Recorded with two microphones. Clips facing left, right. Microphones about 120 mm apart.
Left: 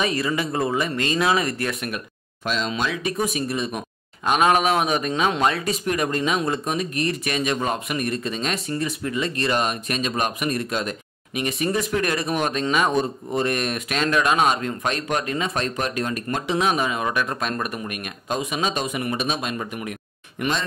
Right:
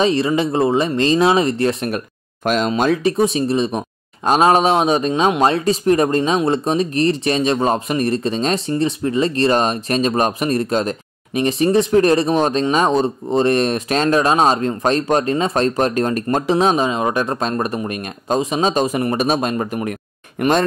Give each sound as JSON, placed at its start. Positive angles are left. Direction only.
{"t": 0.0, "sound": "speech", "side_deg": -25}
{"t": 1.9, "sound": "speech", "side_deg": -45}